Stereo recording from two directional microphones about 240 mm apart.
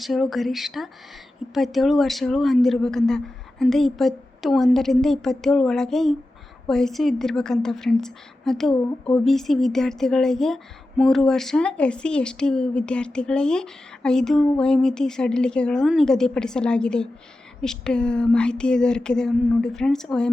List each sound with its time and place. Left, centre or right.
0.0 s a woman's voice: centre